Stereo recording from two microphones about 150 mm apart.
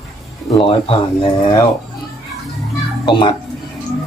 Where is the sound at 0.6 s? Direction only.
35° left (ahead or behind).